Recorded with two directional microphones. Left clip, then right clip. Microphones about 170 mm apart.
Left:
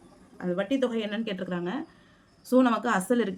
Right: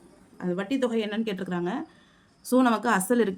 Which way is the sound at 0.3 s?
25° right (ahead or behind).